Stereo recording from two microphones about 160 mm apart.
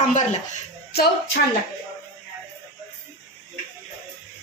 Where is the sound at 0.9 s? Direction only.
90° left.